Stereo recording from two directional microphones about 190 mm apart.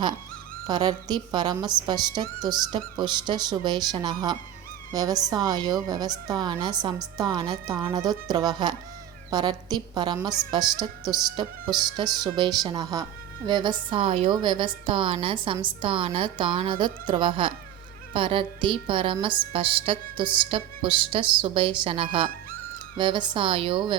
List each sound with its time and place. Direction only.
0.7 s music: 20° right (ahead or behind)